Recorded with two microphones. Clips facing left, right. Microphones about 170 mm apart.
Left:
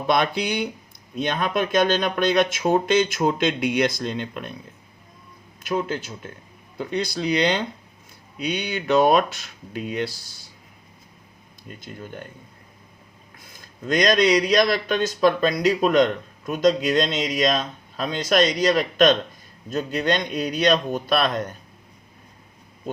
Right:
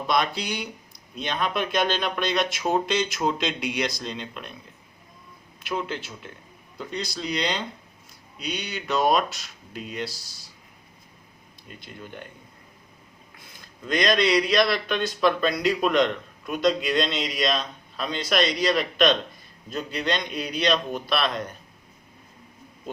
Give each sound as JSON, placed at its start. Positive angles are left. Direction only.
{"t": 0.1, "sound": "speech", "side_deg": 55}
{"t": 5.6, "sound": "speech", "side_deg": 45}
{"t": 6.7, "sound": "speech", "side_deg": 55}
{"t": 11.8, "sound": "speech", "side_deg": 45}
{"t": 13.4, "sound": "speech", "side_deg": 45}